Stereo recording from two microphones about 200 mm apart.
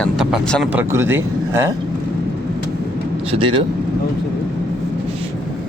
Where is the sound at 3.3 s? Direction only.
25° right (ahead or behind).